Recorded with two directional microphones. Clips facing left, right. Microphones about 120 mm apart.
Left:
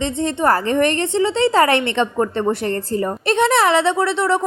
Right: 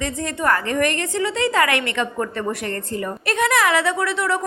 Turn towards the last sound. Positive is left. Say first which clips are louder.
# left 4 dB
turn(degrees=30)  # may be behind; listen again after turning